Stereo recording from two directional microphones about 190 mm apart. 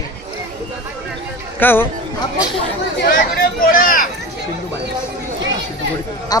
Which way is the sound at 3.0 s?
50° left (ahead or behind).